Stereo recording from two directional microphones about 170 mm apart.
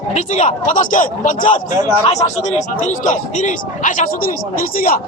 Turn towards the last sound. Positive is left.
turn(degrees=60)  # may be behind; listen again after turning